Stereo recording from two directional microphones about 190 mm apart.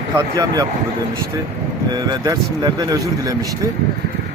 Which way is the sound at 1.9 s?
20° right (ahead or behind).